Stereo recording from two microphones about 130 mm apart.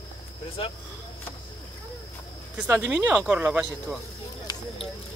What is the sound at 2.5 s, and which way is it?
Speech, 10° right (ahead or behind).